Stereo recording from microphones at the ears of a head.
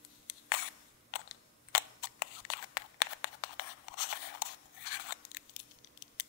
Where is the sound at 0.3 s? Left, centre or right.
Left.